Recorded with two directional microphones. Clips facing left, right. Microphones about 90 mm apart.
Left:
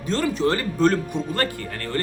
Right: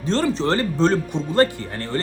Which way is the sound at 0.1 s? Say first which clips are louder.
Right 2 dB; 30° right (ahead or behind).